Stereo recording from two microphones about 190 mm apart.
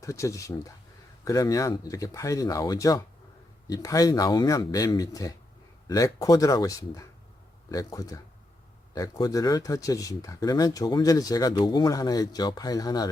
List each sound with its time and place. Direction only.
0.0 s speech: 15° left (ahead or behind)